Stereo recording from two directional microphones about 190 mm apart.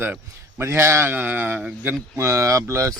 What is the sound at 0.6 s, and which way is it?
A man's voice, 15° right (ahead or behind).